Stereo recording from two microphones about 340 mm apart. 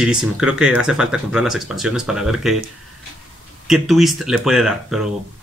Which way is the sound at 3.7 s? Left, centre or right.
Centre.